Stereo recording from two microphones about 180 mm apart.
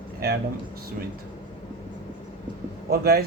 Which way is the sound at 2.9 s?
60° right (ahead or behind).